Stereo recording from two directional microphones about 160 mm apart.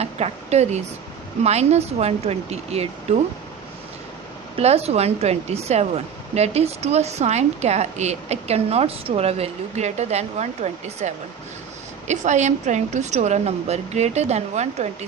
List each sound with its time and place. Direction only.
0.0 s speech: 40° right (ahead or behind)
4.5 s speech: 40° right (ahead or behind)